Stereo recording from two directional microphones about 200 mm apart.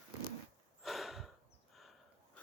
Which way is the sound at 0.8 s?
Centre (ahead or behind).